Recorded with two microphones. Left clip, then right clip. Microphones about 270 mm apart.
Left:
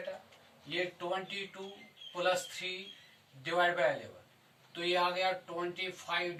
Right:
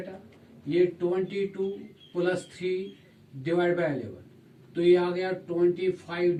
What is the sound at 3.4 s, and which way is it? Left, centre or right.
Speech, left.